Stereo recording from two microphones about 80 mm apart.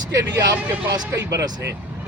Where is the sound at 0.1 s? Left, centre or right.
Right.